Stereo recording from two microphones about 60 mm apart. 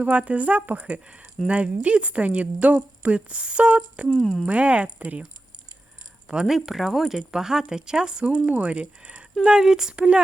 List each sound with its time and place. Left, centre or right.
0.0 s a woman's voice: right
4.2 s speech: centre
4.4 s a woman's voice: right
6.2 s a woman's voice: centre